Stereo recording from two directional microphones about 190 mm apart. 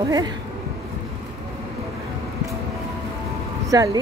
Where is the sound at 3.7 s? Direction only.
20° right (ahead or behind).